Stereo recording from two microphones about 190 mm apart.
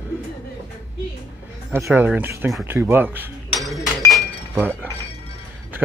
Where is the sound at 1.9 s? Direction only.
10° right (ahead or behind).